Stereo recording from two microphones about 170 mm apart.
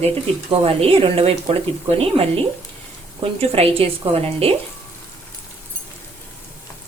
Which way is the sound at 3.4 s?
35° right (ahead or behind).